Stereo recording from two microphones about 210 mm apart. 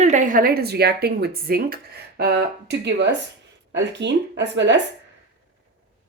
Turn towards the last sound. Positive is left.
turn(degrees=-55)  # may be behind; listen again after turning